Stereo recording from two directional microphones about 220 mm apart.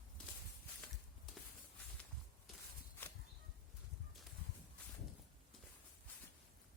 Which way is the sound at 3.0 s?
10° left (ahead or behind).